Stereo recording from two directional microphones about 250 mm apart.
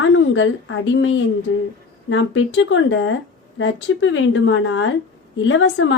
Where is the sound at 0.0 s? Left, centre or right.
Left.